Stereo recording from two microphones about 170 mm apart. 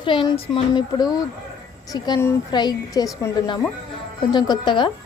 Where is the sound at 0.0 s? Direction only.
30° left (ahead or behind).